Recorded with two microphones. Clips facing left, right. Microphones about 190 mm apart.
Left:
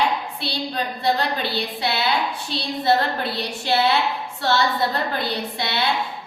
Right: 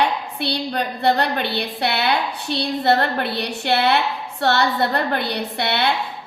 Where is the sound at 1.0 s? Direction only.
65° right (ahead or behind).